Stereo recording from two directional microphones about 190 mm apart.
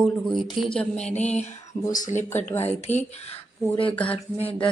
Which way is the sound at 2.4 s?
10° left (ahead or behind).